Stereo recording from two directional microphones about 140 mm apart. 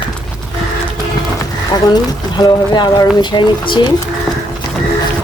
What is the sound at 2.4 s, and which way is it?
Speech, 30° left (ahead or behind).